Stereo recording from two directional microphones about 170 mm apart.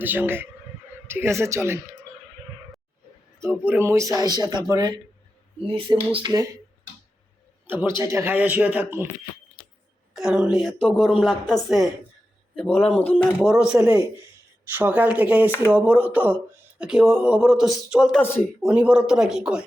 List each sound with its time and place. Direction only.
0.0 s speech: 10° right (ahead or behind)
3.4 s speech: 10° right (ahead or behind)
6.1 s speech: 25° right (ahead or behind)
7.9 s speech: 15° right (ahead or behind)
10.2 s a woman's voice: 5° right (ahead or behind)
13.4 s a woman's voice: 5° right (ahead or behind)
18.2 s speech: 10° left (ahead or behind)
18.6 s a woman's voice: 5° right (ahead or behind)